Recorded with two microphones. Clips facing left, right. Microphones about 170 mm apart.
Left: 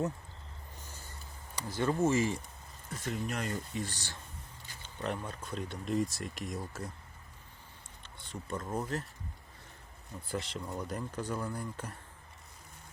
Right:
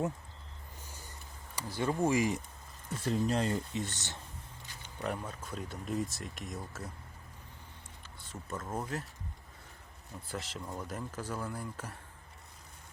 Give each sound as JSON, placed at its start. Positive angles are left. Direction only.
{"t": 1.7, "sound": "speech", "side_deg": -10}
{"t": 2.9, "sound": "speech", "side_deg": -30}
{"t": 5.0, "sound": "speech", "side_deg": -5}
{"t": 8.0, "sound": "speech", "side_deg": -5}
{"t": 10.2, "sound": "speech", "side_deg": 0}